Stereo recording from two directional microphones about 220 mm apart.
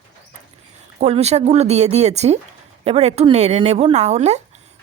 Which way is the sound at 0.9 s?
30° right (ahead or behind).